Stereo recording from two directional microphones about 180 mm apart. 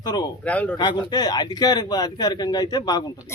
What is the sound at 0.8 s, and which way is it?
A man's voice, 25° left (ahead or behind).